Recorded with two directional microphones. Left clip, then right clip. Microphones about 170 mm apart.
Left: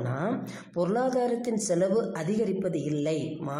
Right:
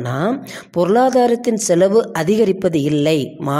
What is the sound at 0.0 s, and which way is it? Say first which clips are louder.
A woman's voice: right 11 dB; 40° right (ahead or behind).